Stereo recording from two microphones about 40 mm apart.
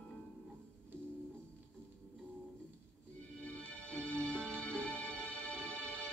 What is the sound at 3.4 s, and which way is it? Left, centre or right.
Music, left.